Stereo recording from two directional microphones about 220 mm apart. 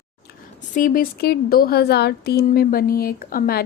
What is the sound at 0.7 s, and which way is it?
A woman's voice, 40° left (ahead or behind).